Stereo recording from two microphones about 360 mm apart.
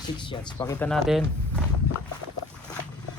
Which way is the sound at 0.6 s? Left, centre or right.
Centre.